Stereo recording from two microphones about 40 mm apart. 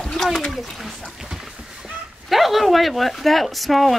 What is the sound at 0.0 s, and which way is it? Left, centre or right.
Splash, centre.